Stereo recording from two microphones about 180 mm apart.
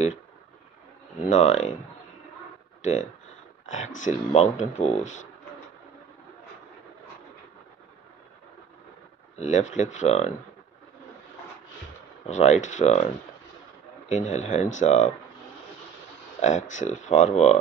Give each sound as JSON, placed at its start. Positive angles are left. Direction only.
{"t": 1.2, "sound": "speech", "side_deg": 40}
{"t": 2.8, "sound": "speech", "side_deg": 40}
{"t": 9.4, "sound": "speech", "side_deg": 40}
{"t": 12.3, "sound": "speech", "side_deg": 40}
{"t": 16.3, "sound": "speech", "side_deg": 40}